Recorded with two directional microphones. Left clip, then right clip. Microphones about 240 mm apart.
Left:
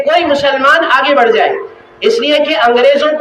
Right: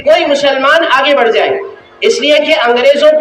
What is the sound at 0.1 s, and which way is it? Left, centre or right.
A man's voice, left.